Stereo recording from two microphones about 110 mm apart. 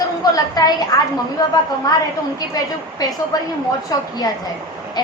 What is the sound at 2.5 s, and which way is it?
A woman's voice, 35° left (ahead or behind).